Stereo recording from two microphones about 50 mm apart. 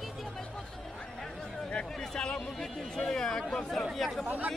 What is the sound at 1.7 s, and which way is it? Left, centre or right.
Speech, centre.